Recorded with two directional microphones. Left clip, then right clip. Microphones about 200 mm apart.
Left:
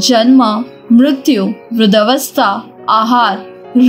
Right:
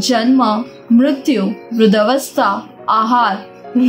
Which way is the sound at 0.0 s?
20° left (ahead or behind).